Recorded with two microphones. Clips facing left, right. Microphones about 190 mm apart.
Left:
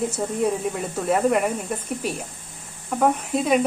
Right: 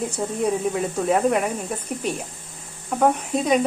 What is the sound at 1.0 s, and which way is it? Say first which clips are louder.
Speech: even; centre (ahead or behind).